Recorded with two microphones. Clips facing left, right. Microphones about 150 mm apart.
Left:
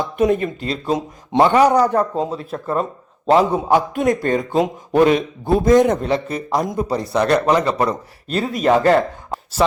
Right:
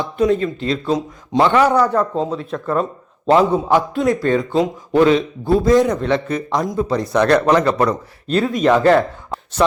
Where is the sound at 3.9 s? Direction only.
50° left (ahead or behind).